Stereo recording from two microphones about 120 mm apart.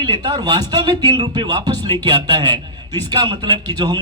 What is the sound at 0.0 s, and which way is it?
A man's voice, 40° right (ahead or behind).